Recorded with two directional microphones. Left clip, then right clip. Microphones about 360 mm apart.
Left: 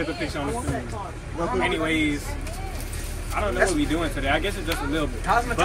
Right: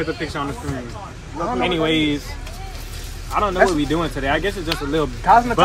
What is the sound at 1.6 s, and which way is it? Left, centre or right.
Speech, centre.